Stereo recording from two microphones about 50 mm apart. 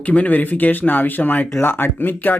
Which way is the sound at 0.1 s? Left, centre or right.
Left.